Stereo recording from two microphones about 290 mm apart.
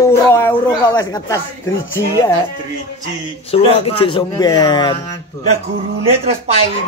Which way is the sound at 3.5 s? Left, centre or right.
Centre.